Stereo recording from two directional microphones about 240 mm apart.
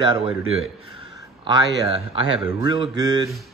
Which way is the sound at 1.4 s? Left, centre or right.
Right.